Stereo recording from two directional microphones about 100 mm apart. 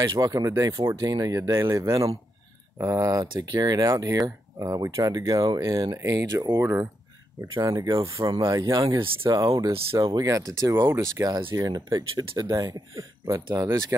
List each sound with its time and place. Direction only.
0.2 s speech: 35° right (ahead or behind)
7.6 s speech: 40° right (ahead or behind); by 11.2 s 25° right (ahead or behind)
11.2 s speech: 40° right (ahead or behind)